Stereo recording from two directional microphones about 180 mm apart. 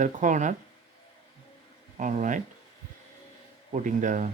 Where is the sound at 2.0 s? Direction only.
45° right (ahead or behind).